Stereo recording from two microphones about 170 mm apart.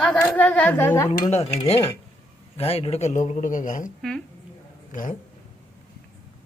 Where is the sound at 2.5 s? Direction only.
35° left (ahead or behind).